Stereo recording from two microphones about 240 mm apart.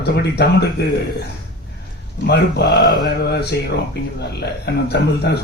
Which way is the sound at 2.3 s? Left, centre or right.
Left.